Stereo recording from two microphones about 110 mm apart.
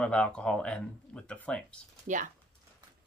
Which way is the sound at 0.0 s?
10° left (ahead or behind).